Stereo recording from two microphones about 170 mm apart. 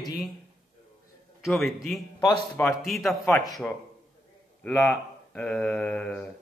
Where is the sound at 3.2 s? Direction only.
20° left (ahead or behind).